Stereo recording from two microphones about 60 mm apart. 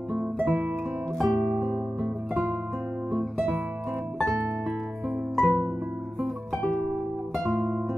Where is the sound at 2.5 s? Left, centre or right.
Right.